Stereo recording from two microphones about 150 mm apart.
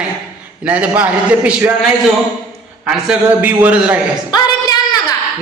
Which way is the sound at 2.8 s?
5° right (ahead or behind).